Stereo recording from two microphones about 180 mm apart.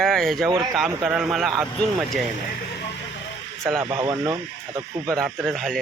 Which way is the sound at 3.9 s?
20° right (ahead or behind).